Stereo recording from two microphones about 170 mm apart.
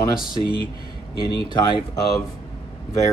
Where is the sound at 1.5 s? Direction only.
25° left (ahead or behind).